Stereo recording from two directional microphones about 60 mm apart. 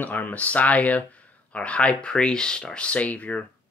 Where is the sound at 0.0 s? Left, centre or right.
Left.